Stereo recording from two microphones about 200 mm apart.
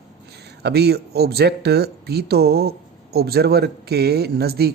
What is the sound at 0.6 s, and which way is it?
Speech, 55° right (ahead or behind).